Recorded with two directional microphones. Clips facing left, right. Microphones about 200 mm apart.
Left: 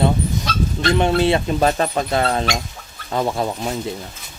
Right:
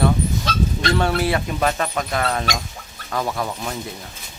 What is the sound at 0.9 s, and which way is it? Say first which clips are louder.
Speech: left 5 dB; 20° left (ahead or behind).